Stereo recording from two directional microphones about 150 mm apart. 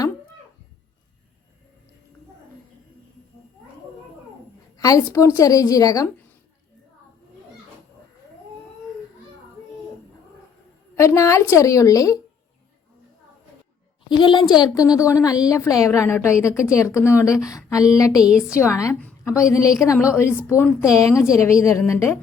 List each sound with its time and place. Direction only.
4.8 s speech: 20° left (ahead or behind)
10.9 s speech: 20° left (ahead or behind)
14.1 s speech: 30° left (ahead or behind)
18.2 s a woman's voice: 5° right (ahead or behind)
18.5 s speech: 20° left (ahead or behind)
18.9 s a sound: 10° left (ahead or behind)
19.3 s a woman's voice: 20° left (ahead or behind)
20.7 s a woman's voice: 5° right (ahead or behind)
21.4 s a woman's voice: 20° left (ahead or behind)